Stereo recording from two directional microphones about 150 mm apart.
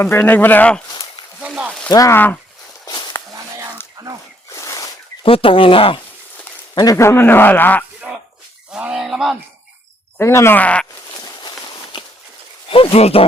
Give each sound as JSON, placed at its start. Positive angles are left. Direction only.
{"t": 0.0, "sound": "speech", "side_deg": 15}
{"t": 1.4, "sound": "a sound", "side_deg": -5}
{"t": 1.9, "sound": "speech", "side_deg": 20}
{"t": 2.8, "sound": "a sound", "side_deg": 25}
{"t": 3.3, "sound": "whispering", "side_deg": -20}
{"t": 4.0, "sound": "a sound", "side_deg": -20}
{"t": 4.5, "sound": "a sound", "side_deg": 20}
{"t": 5.2, "sound": "speech", "side_deg": 35}
{"t": 6.7, "sound": "speech", "side_deg": 20}
{"t": 8.7, "sound": "speech", "side_deg": -5}
{"t": 10.2, "sound": "speech", "side_deg": 15}
{"t": 11.3, "sound": "walk", "side_deg": 30}
{"t": 12.6, "sound": "speech", "side_deg": 35}